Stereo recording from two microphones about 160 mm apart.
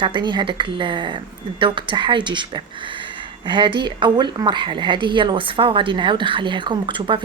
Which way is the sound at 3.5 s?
30° right (ahead or behind).